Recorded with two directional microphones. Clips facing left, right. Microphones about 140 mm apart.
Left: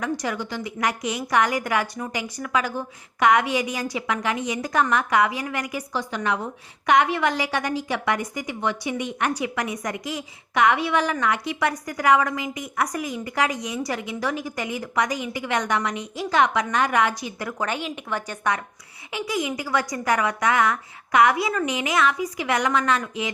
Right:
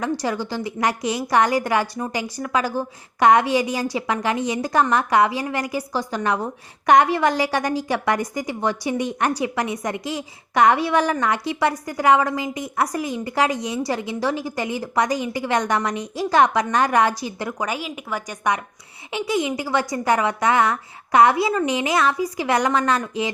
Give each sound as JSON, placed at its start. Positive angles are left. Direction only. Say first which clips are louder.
{"t": 0.0, "sound": "a woman's voice", "louder": "right 3 dB", "side_deg": -30}
{"t": 17.6, "sound": "a woman's voice", "louder": "left 2 dB", "side_deg": -5}
{"t": 19.1, "sound": "a woman's voice", "louder": "right 4 dB", "side_deg": -25}